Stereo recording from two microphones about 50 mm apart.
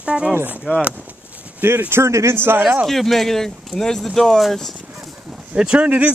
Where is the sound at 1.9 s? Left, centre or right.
Right.